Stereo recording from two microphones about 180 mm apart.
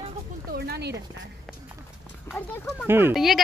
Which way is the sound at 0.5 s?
60° right (ahead or behind).